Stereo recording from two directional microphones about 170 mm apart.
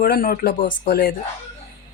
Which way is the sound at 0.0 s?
60° left (ahead or behind).